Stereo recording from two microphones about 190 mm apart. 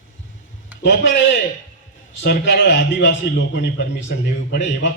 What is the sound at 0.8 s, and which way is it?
A man's voice, 70° left (ahead or behind).